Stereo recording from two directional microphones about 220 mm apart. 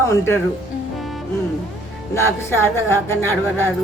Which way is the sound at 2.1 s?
10° left (ahead or behind).